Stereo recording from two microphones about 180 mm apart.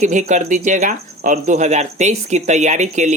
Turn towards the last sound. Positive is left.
turn(degrees=-40)  # may be behind; listen again after turning